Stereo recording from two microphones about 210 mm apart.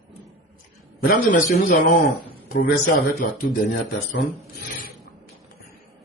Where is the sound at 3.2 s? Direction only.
40° left (ahead or behind).